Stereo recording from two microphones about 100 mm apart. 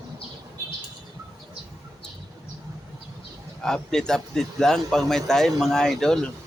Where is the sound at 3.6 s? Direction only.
5° left (ahead or behind).